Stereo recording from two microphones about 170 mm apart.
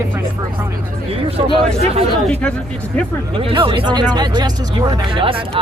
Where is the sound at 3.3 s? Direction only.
30° right (ahead or behind).